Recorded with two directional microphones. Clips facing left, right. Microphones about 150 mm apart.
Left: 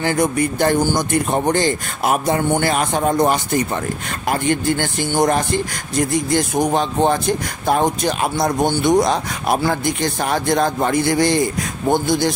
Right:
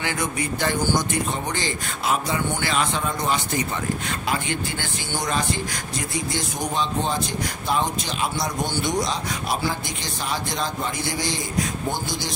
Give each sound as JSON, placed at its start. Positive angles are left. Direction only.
{"t": 0.0, "sound": "a man's voice", "side_deg": 45}